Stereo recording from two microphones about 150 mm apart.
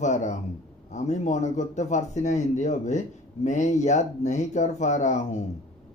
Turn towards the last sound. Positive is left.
turn(degrees=50)  # may be behind; listen again after turning